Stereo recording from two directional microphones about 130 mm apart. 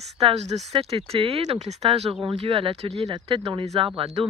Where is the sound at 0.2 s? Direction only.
55° right (ahead or behind).